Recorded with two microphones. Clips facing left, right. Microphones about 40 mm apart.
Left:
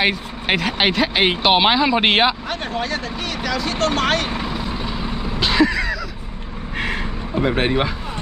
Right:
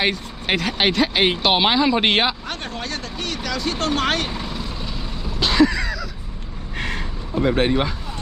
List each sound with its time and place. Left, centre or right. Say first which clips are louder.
0.0 s speech: left 2 dB; centre
4.3 s vehicle: left 4 dB; centre
5.4 s a sound: even; centre